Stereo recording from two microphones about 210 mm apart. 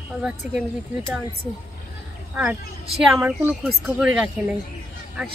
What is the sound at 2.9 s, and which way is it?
Speech, centre (ahead or behind).